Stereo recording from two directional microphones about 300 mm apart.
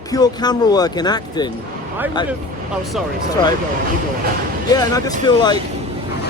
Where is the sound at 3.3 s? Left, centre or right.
Centre.